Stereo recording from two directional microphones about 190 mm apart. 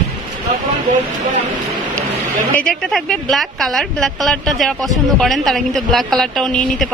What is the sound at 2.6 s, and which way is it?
A woman's voice, 5° left (ahead or behind).